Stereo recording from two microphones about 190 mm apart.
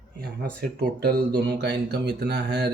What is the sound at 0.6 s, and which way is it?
Speech, 50° right (ahead or behind).